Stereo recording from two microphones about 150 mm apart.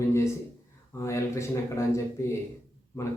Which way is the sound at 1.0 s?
20° left (ahead or behind).